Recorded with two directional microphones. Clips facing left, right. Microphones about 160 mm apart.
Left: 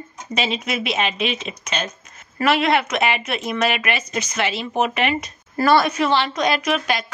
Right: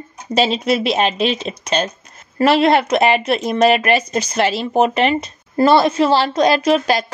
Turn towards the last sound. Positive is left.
turn(degrees=-35)  # may be behind; listen again after turning